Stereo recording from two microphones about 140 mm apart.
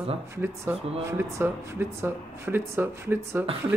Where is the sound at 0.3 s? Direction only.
15° right (ahead or behind).